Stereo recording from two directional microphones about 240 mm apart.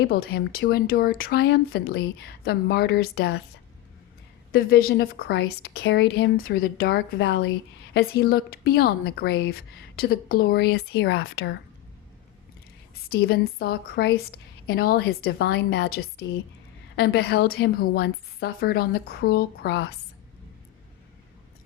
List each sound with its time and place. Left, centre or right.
0.0 s a woman's voice: left
4.5 s a woman's voice: left
13.1 s a woman's voice: left